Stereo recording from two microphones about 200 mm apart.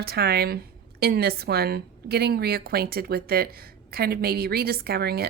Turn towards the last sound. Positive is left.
turn(degrees=-50)  # may be behind; listen again after turning